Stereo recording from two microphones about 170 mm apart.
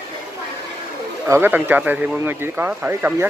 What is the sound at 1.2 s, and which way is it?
Speech, 15° right (ahead or behind).